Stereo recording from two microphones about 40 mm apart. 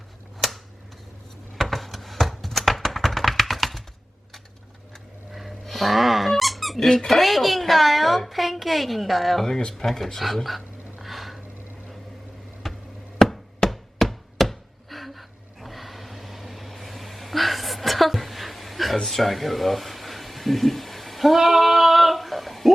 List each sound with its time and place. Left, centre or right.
0.4 s a sound: centre
5.3 s squeak: centre
7.1 s a woman's voice: centre
9.5 s speech: left
9.7 s speech: centre
11.0 s a sound: centre
12.6 s tick: centre
13.1 s chopping: centre
15.6 s a sound: centre